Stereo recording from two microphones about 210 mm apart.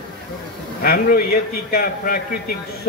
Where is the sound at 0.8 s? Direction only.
45° left (ahead or behind).